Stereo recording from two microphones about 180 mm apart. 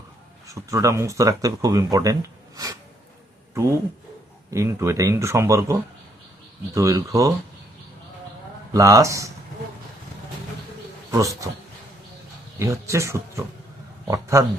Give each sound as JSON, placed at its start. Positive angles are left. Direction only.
{"t": 0.4, "sound": "speech", "side_deg": -20}
{"t": 3.5, "sound": "speech", "side_deg": -15}
{"t": 6.7, "sound": "speech", "side_deg": -15}
{"t": 8.7, "sound": "speech", "side_deg": -15}
{"t": 11.1, "sound": "speech", "side_deg": -20}
{"t": 12.5, "sound": "speech", "side_deg": -15}